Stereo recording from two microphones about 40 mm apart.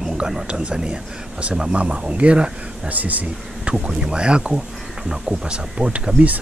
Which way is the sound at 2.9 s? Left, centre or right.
Right.